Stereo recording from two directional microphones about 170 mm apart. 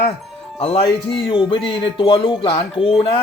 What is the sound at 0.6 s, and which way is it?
Speech, 35° left (ahead or behind).